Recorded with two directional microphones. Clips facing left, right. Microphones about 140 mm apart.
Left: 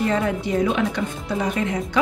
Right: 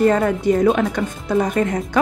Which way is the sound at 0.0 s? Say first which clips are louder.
Right 6 dB; 45° right (ahead or behind).